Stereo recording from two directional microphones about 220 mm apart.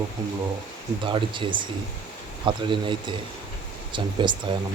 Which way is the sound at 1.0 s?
20° right (ahead or behind).